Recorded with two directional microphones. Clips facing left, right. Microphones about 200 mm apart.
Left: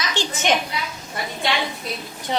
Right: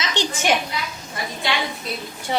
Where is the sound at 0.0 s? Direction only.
20° right (ahead or behind).